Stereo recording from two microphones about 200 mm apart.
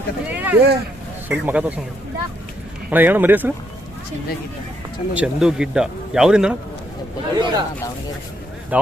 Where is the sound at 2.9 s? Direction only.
10° right (ahead or behind).